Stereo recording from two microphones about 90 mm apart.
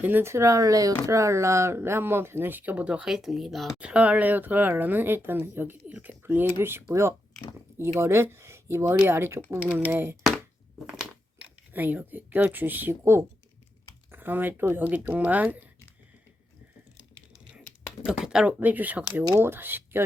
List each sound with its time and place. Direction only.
0.0 s speech: 25° right (ahead or behind); by 3.7 s centre (ahead or behind)
3.8 s speech: 15° right (ahead or behind)
11.7 s speech: 20° right (ahead or behind)
18.0 s speech: 10° right (ahead or behind)